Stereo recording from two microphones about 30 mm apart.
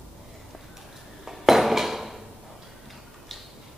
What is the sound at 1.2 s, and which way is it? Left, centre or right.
Dishes, centre.